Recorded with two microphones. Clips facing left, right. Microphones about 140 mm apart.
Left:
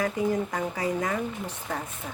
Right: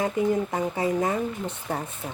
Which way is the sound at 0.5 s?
25° right (ahead or behind).